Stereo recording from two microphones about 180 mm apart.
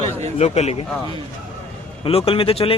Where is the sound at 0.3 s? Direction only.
35° left (ahead or behind).